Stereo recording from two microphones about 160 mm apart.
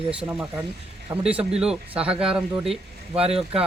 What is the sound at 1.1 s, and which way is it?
Speech, 10° right (ahead or behind).